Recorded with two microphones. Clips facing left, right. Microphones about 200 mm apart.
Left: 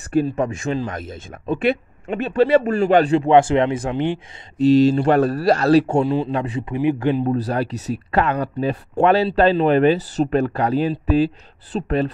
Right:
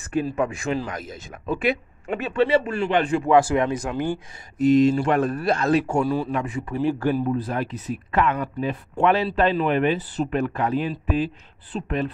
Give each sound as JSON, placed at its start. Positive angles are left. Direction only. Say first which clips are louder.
{"t": 0.4, "sound": "speech", "louder": "left 2 dB", "side_deg": 25}
{"t": 6.0, "sound": "speech", "louder": "left 3 dB", "side_deg": 20}
{"t": 7.4, "sound": "speech", "louder": "left 4 dB", "side_deg": 35}
{"t": 9.9, "sound": "speech", "louder": "left 5 dB", "side_deg": 85}
{"t": 10.2, "sound": "speech", "louder": "left 5 dB", "side_deg": 35}